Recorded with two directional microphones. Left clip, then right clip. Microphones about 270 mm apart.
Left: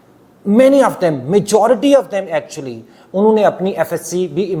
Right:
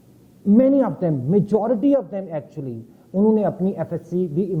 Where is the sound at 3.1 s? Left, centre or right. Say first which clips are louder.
Left 7 dB; left.